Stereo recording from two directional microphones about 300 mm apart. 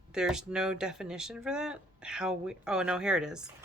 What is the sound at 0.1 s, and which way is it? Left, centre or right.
Speech, centre.